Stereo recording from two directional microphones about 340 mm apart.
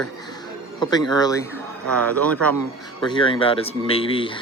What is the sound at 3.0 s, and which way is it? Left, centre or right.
Speech, centre.